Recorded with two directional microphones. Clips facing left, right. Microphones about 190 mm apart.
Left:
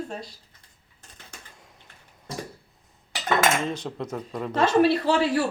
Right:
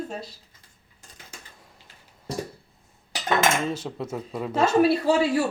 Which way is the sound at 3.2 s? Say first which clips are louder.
Even; 5° right (ahead or behind).